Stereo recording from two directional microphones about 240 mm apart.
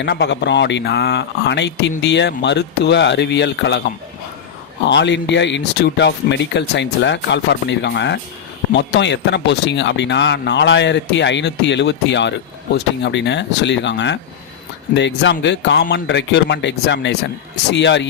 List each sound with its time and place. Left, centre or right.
0.0 s speech: left
4.9 s speech: left